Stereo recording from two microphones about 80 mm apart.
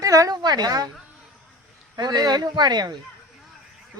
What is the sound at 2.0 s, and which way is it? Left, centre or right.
Speech, right.